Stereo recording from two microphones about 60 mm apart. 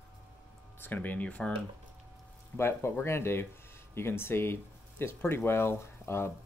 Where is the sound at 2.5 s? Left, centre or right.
Left.